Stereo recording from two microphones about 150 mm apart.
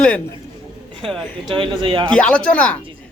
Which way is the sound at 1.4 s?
30° right (ahead or behind).